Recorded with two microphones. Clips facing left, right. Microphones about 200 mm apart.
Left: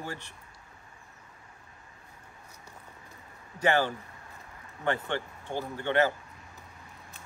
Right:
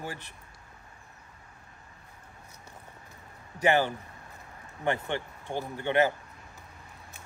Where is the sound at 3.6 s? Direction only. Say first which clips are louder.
Right 1 dB; 15° right (ahead or behind).